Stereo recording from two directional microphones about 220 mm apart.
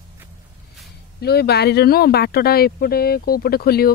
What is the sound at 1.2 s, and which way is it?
Speech, 45° left (ahead or behind).